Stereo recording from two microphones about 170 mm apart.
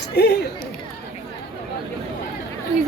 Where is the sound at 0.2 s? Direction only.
75° left (ahead or behind).